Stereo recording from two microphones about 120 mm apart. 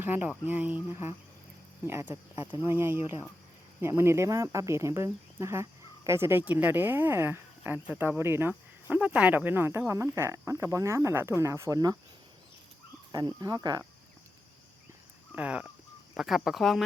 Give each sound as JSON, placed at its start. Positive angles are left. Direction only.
{"t": 0.0, "sound": "speech", "side_deg": -15}
{"t": 13.1, "sound": "speech", "side_deg": -35}
{"t": 15.4, "sound": "speech", "side_deg": -10}